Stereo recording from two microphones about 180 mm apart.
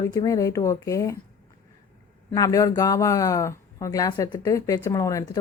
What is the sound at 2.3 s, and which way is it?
Speech, 20° left (ahead or behind).